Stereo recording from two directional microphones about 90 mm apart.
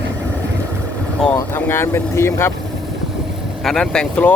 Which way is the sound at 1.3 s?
25° left (ahead or behind).